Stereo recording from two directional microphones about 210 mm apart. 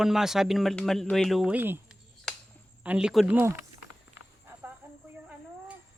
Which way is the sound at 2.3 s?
Centre (ahead or behind).